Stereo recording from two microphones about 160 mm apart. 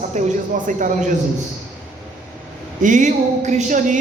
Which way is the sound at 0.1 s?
50° right (ahead or behind).